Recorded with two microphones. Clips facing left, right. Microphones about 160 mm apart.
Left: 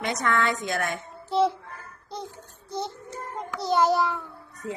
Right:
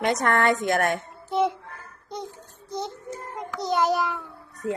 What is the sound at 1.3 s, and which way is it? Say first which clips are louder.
Speech: left 1 dB; 20° right (ahead or behind).